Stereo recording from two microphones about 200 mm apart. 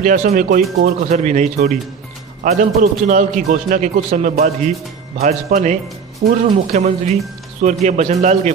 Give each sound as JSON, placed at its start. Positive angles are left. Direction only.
{"t": 0.0, "sound": "a man's voice", "side_deg": -40}